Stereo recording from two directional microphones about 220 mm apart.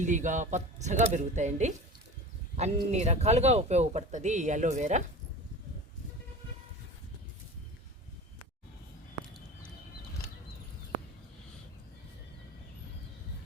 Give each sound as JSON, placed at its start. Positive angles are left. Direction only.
{"t": 0.0, "sound": "speech", "side_deg": -35}